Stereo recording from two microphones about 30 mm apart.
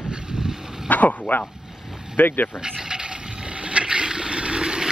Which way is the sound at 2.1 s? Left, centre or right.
Left.